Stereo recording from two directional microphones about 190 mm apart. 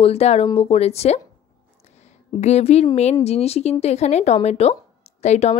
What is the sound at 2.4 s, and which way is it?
A woman's voice, 35° left (ahead or behind).